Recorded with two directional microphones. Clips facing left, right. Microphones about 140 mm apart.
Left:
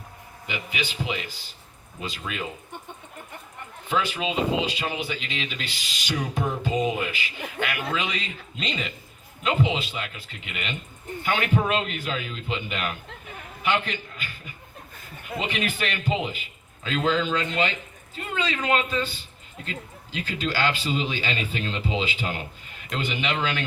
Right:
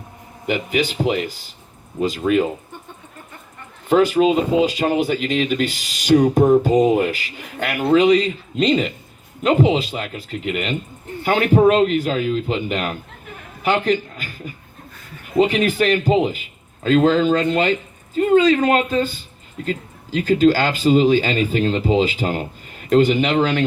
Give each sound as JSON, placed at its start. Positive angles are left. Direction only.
{"t": 0.4, "sound": "speech", "side_deg": -45}
{"t": 3.8, "sound": "a man's voice", "side_deg": -45}